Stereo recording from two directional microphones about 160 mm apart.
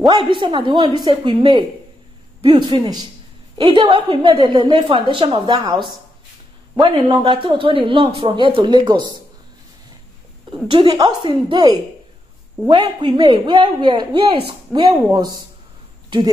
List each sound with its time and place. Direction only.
0.1 s a woman's voice: 30° right (ahead or behind)
10.5 s a woman's voice: 30° right (ahead or behind)
14.7 s speech: 5° left (ahead or behind)
15.1 s a woman's voice: 25° right (ahead or behind)